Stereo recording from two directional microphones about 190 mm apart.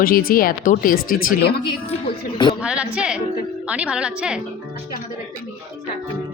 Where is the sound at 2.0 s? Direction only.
25° left (ahead or behind).